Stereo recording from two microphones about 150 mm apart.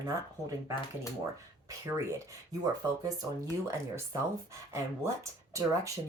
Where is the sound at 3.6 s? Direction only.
20° right (ahead or behind).